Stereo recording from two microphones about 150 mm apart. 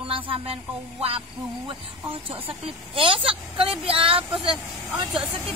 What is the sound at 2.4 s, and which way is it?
Speech, 35° right (ahead or behind).